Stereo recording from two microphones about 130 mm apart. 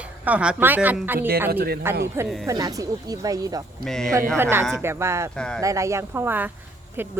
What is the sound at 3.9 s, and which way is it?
Speech, 5° left (ahead or behind).